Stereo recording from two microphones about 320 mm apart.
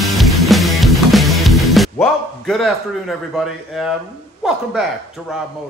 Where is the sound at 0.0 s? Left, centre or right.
Centre.